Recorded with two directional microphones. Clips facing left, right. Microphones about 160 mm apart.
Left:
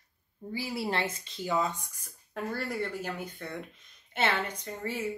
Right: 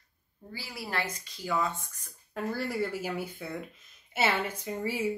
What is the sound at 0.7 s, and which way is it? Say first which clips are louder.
Speech: left 2 dB; 25° left (ahead or behind).